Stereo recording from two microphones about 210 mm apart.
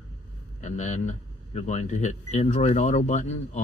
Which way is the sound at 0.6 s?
35° left (ahead or behind).